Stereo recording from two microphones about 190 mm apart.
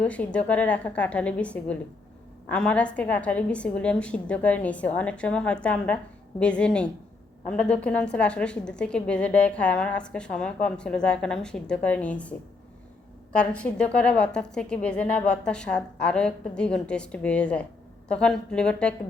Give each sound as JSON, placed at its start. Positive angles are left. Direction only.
{"t": 0.0, "sound": "a woman's voice", "side_deg": 5}
{"t": 13.3, "sound": "a woman's voice", "side_deg": 5}